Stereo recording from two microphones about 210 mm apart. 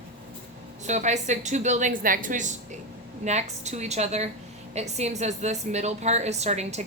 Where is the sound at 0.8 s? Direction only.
35° right (ahead or behind).